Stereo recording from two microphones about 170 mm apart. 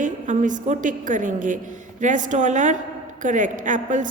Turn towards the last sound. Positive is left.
turn(degrees=-50)  # may be behind; listen again after turning